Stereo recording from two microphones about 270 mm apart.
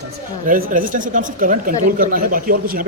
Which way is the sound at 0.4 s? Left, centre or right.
Right.